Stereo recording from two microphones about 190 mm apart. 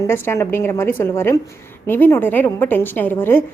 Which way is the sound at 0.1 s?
10° left (ahead or behind).